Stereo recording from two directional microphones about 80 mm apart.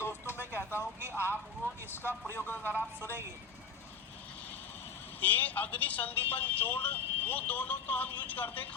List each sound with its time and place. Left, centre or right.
0.0 s a sound: left
2.3 s speech: left
5.2 s speech: left